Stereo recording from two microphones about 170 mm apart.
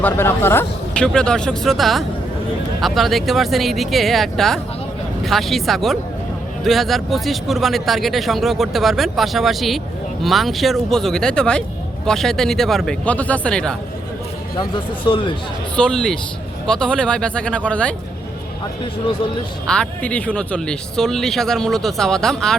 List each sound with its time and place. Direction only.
0.0 s speech: 15° left (ahead or behind)
14.6 s speech: 30° left (ahead or behind)
15.7 s speech: 5° left (ahead or behind)
19.6 s speech: 5° left (ahead or behind)